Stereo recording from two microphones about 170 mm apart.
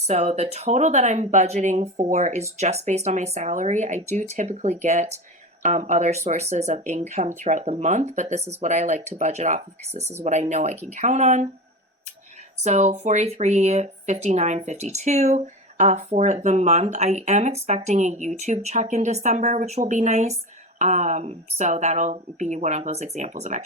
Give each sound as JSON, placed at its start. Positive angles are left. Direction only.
{"t": 0.1, "sound": "speech", "side_deg": -40}
{"t": 10.0, "sound": "speech", "side_deg": -15}
{"t": 10.2, "sound": "speech", "side_deg": -45}
{"t": 12.6, "sound": "speech", "side_deg": -40}